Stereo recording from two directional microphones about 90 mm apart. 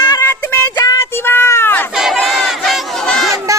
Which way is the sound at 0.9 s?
25° left (ahead or behind).